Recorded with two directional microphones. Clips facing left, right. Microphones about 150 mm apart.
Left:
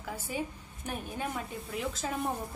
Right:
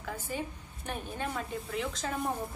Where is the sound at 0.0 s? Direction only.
10° left (ahead or behind).